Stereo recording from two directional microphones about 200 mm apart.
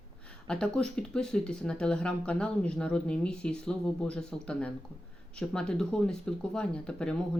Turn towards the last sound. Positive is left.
turn(degrees=5)  # may be behind; listen again after turning